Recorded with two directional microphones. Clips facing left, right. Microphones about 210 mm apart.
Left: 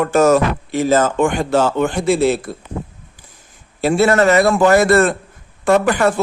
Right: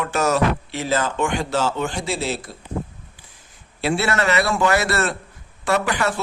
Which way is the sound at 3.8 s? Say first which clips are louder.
Left 8 dB; 45° left (ahead or behind).